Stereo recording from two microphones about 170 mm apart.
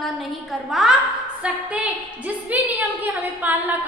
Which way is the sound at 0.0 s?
Centre (ahead or behind).